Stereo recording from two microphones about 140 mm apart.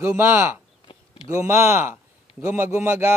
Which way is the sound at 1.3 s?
20° right (ahead or behind).